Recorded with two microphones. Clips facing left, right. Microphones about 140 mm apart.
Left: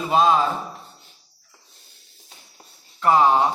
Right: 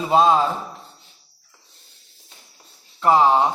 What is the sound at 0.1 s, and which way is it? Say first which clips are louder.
Speech: right 2 dB; 25° right (ahead or behind).